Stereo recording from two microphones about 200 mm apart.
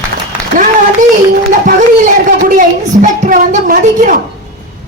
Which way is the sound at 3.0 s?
40° right (ahead or behind).